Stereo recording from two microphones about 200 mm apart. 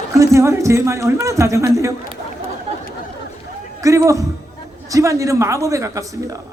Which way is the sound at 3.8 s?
15° right (ahead or behind).